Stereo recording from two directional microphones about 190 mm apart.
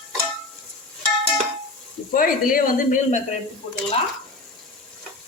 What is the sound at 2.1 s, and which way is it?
Speech, 50° left (ahead or behind).